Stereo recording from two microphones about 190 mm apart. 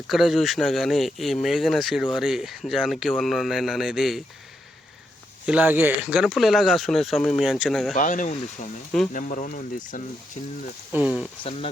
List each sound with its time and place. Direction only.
0.1 s speech: centre (ahead or behind)
5.5 s speech: 10° right (ahead or behind)
7.9 s speech: 45° left (ahead or behind)
10.9 s speech: 5° right (ahead or behind)
11.4 s speech: 30° left (ahead or behind)